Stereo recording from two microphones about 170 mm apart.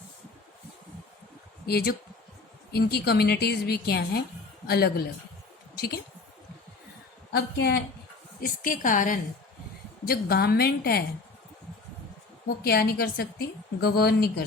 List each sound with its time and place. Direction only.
1.6 s a woman's voice: 65° left (ahead or behind)
7.3 s a woman's voice: 75° left (ahead or behind)
8.4 s a woman's voice: 55° left (ahead or behind)
10.1 s a woman's voice: 65° left (ahead or behind)
12.6 s a woman's voice: 65° left (ahead or behind)